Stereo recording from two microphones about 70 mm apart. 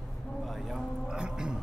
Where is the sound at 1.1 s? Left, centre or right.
Centre.